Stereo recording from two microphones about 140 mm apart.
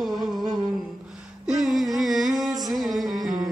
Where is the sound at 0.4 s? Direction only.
30° right (ahead or behind).